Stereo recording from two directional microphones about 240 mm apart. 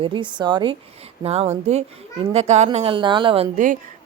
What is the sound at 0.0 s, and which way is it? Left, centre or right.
A woman's voice, centre.